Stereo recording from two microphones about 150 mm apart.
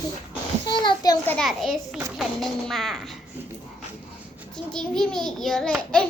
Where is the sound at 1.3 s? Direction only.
5° left (ahead or behind).